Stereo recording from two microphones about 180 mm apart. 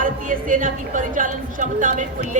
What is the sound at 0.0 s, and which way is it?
A woman's voice, 50° right (ahead or behind).